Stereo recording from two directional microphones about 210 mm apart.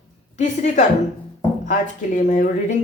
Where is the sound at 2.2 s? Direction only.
40° left (ahead or behind).